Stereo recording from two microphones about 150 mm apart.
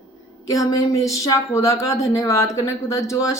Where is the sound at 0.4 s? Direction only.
20° left (ahead or behind).